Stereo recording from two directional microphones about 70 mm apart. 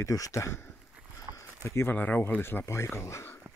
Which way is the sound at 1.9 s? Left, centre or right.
Left.